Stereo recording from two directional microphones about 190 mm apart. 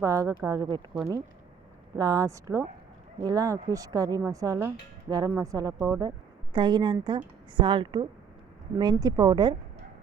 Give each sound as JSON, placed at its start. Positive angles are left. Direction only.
{"t": 0.0, "sound": "speech", "side_deg": -15}
{"t": 2.0, "sound": "speech", "side_deg": -20}